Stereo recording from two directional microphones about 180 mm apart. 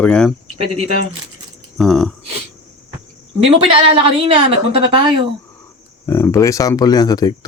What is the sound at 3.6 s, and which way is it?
A woman's voice, 30° right (ahead or behind).